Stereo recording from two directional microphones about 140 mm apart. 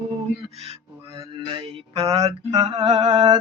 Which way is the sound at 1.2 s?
35° right (ahead or behind).